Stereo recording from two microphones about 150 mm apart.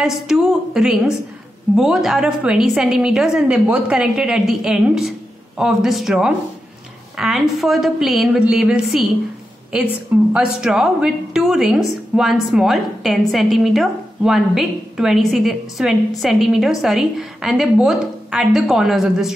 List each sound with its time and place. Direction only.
0.0 s a woman's voice: centre (ahead or behind)
10.3 s a woman's voice: 5° right (ahead or behind)